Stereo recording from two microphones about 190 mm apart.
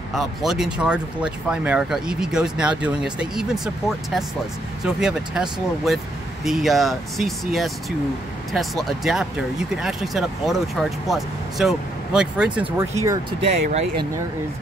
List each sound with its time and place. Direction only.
0.1 s speech: centre (ahead or behind)
13.4 s speech: 35° right (ahead or behind)